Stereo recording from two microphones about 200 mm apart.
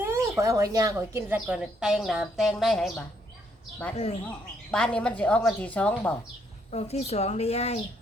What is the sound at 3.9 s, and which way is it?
Speech, 30° left (ahead or behind).